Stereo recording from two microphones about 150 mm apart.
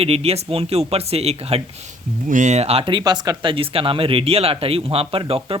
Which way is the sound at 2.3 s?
55° right (ahead or behind).